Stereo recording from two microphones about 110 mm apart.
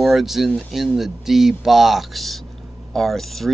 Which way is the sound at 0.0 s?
Centre (ahead or behind).